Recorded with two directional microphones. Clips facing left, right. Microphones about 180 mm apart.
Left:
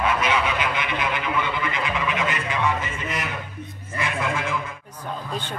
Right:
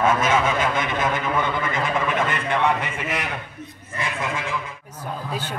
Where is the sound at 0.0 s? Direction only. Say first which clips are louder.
Right 3 dB; 45° right (ahead or behind); by 3.3 s 60° right (ahead or behind).